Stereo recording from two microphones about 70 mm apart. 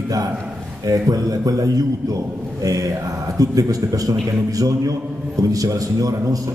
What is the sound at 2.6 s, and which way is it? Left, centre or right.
Mantra, right.